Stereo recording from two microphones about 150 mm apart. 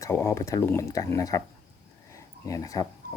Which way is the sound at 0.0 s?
20° left (ahead or behind).